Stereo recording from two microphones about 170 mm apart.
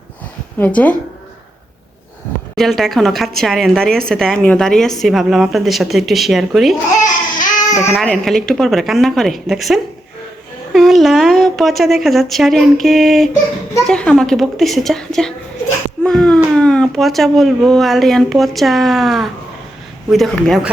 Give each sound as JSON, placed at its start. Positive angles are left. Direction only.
{"t": 0.6, "sound": "a woman's voice", "side_deg": 10}
{"t": 2.6, "sound": "speech", "side_deg": 0}
{"t": 7.0, "sound": "babbling", "side_deg": 50}
{"t": 7.9, "sound": "speech", "side_deg": 5}